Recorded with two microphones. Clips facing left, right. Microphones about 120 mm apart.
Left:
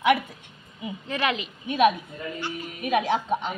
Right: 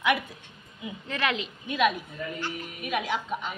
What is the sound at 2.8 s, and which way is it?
Speech, 40° left (ahead or behind).